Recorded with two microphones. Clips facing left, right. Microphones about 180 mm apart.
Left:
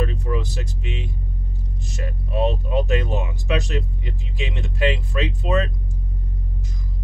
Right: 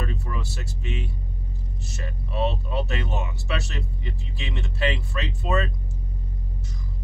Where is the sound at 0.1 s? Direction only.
15° left (ahead or behind).